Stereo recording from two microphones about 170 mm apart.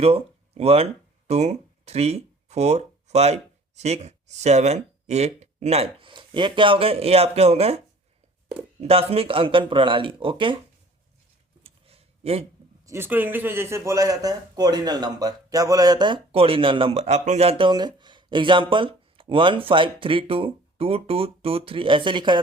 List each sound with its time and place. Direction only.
0.0 s speech: 35° right (ahead or behind)
8.8 s speech: 35° right (ahead or behind)
11.6 s a sound: 35° right (ahead or behind)
12.8 s speech: 15° right (ahead or behind)